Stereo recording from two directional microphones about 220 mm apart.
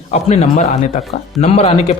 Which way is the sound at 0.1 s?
30° left (ahead or behind).